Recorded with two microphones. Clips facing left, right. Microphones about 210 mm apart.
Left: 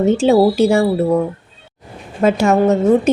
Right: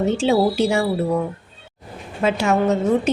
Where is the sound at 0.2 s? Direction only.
45° left (ahead or behind).